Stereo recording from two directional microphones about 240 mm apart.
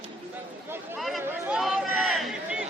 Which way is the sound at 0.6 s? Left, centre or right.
Centre.